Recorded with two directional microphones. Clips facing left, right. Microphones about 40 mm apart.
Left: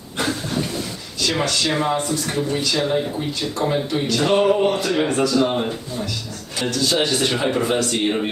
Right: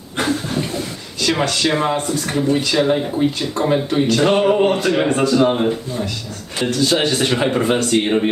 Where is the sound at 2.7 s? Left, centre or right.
Right.